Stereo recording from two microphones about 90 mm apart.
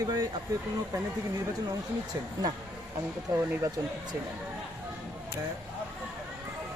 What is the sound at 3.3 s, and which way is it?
Speech, 40° right (ahead or behind).